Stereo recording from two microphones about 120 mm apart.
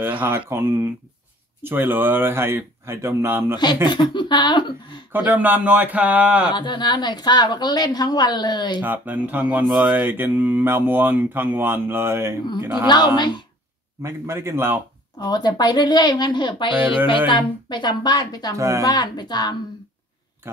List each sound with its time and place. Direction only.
0.5 s speech: 20° right (ahead or behind)
3.5 s a woman's voice: 40° left (ahead or behind)
5.1 s speech: 15° right (ahead or behind)
6.5 s a woman's voice: 40° left (ahead or behind)
8.8 s speech: 15° right (ahead or behind)
9.9 s speech: 15° right (ahead or behind)
12.8 s a woman's voice: 35° left (ahead or behind)
14.0 s speech: 20° right (ahead or behind)
15.1 s a woman's voice: 35° left (ahead or behind)
18.6 s speech: 25° right (ahead or behind)
18.9 s a woman's voice: 35° left (ahead or behind)